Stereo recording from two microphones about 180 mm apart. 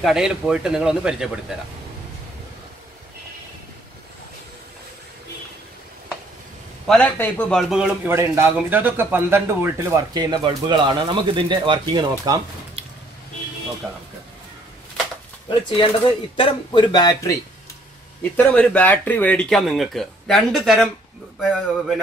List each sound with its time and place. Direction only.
0.0 s speech: 5° right (ahead or behind)
6.9 s speech: 5° left (ahead or behind)
8.1 s speech: 15° right (ahead or behind)
16.3 s speech: 30° left (ahead or behind)
18.3 s speech: 5° left (ahead or behind)